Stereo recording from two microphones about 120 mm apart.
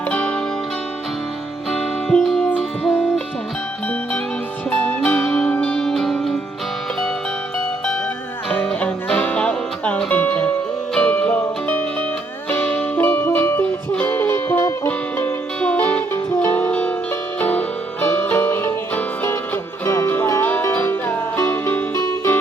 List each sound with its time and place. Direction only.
0.1 s music: 5° left (ahead or behind)
1.7 s music: 5° left (ahead or behind)
4.7 s music: 15° left (ahead or behind)
8.4 s music: 5° left (ahead or behind)